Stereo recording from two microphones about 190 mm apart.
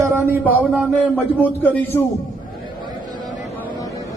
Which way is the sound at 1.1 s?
10° left (ahead or behind).